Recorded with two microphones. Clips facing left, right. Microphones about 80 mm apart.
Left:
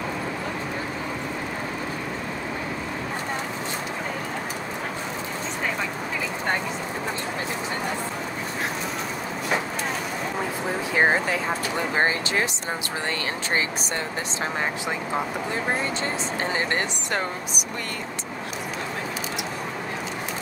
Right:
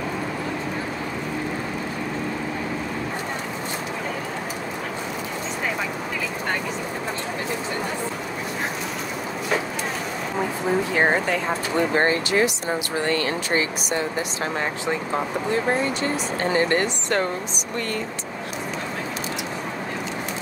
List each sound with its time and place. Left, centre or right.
11.0 s speech: centre
11.9 s speech: centre
16.5 s speech: left